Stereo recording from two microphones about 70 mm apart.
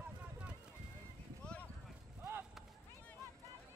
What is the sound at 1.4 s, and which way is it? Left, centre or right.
Clip-clop, centre.